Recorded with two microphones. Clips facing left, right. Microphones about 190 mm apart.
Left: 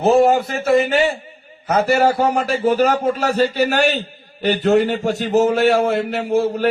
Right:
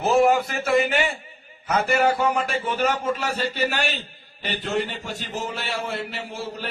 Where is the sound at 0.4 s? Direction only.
30° left (ahead or behind).